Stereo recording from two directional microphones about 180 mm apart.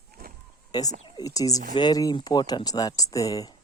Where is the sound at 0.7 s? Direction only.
20° left (ahead or behind).